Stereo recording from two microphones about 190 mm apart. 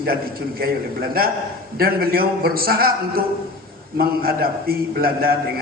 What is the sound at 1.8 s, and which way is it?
A man's voice, 50° right (ahead or behind).